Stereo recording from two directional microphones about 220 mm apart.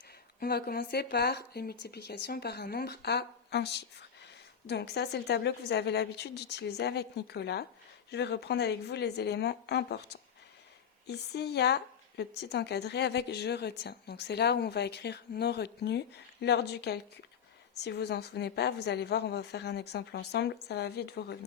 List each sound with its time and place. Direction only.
0.3 s a woman's voice: 45° left (ahead or behind)